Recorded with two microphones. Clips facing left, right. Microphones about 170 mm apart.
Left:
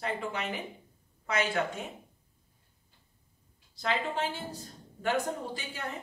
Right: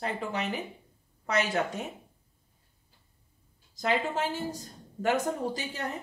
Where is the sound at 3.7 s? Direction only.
40° right (ahead or behind).